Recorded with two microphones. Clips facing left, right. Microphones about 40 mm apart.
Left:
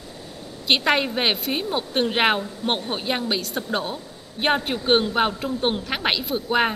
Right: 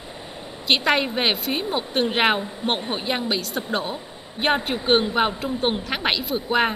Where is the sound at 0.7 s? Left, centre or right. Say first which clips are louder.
Even; centre.